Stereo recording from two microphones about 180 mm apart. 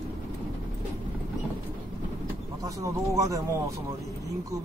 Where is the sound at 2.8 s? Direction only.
20° right (ahead or behind).